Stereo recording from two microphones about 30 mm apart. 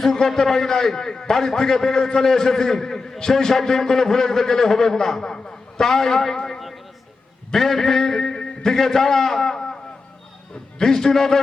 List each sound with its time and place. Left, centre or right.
0.0 s a man's voice: centre
5.2 s a man's voice: left
7.5 s a man's voice: centre
10.8 s a man's voice: centre